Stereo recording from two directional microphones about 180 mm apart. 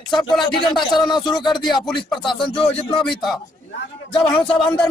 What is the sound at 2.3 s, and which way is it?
Speech, 30° left (ahead or behind).